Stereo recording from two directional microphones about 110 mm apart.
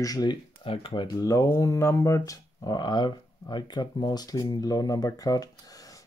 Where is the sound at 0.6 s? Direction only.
55° left (ahead or behind).